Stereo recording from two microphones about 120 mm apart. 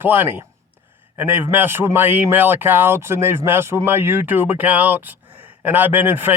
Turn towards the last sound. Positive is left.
turn(degrees=-15)  # may be behind; listen again after turning